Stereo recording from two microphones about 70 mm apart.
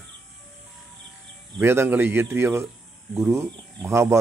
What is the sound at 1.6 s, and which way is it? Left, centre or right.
Speech, right.